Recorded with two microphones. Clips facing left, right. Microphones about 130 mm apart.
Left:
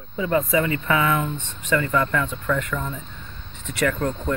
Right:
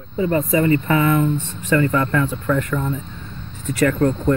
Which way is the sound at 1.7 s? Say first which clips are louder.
Right 4 dB; 40° right (ahead or behind).